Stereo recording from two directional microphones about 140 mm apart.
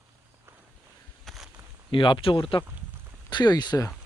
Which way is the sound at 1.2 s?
Centre (ahead or behind).